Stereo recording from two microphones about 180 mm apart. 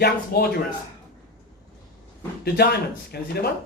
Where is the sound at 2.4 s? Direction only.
65° left (ahead or behind).